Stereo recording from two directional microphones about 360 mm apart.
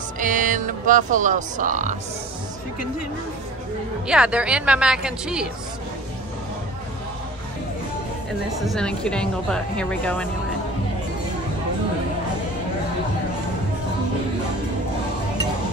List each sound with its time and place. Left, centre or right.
0.2 s speech: right
4.1 s a woman's voice: centre
8.5 s a woman's voice: centre